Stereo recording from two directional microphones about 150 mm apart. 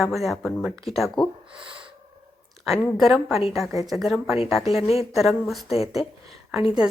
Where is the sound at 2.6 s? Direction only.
Centre (ahead or behind).